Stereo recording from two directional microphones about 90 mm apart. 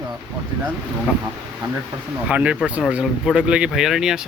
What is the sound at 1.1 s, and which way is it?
Speech, 10° right (ahead or behind).